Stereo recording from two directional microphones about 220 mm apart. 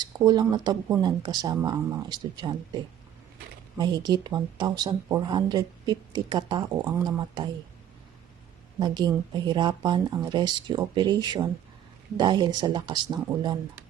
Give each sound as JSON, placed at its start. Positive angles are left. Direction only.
{"t": 0.0, "sound": "speech", "side_deg": -20}
{"t": 3.8, "sound": "speech", "side_deg": -20}
{"t": 8.8, "sound": "speech", "side_deg": -20}